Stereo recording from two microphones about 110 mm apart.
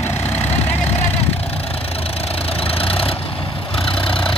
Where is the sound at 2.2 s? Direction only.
60° left (ahead or behind).